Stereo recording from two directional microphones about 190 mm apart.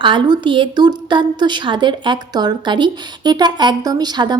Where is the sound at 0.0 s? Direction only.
25° right (ahead or behind).